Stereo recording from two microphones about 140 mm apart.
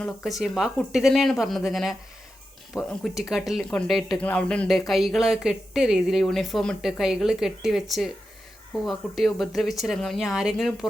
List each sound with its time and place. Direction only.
0.3 s speech: centre (ahead or behind)